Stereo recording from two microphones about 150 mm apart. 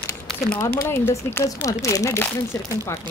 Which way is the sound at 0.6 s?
20° left (ahead or behind).